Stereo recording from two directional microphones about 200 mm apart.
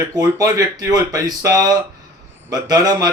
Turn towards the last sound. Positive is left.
turn(degrees=-20)  # may be behind; listen again after turning